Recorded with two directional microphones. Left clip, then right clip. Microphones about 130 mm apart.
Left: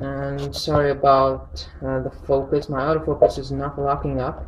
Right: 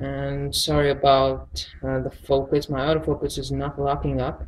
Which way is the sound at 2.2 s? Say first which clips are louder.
Left 1 dB; centre (ahead or behind).